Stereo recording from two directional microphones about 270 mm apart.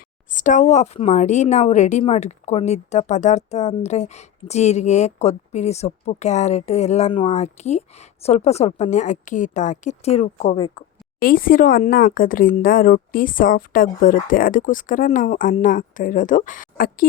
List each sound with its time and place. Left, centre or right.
0.3 s speech: left
11.2 s speech: left